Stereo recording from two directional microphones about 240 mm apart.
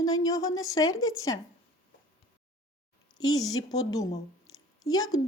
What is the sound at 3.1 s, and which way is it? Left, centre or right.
Speech, centre.